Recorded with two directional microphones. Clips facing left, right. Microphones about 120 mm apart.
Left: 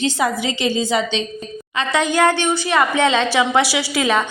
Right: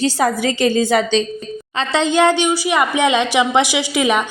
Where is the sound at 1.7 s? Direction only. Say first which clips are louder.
Right 2 dB; 30° right (ahead or behind).